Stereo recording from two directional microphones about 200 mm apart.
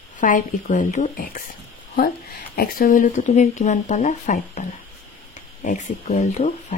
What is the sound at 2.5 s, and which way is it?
Speech, 45° left (ahead or behind).